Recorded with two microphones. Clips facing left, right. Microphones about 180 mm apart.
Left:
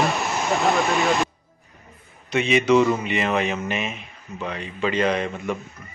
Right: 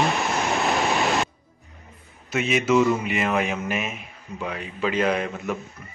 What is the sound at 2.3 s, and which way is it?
A man's voice, 5° right (ahead or behind).